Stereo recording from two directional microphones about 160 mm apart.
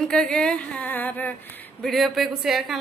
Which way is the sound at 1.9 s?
Centre (ahead or behind).